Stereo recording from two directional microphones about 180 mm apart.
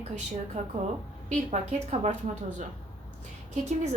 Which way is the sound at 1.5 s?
40° right (ahead or behind).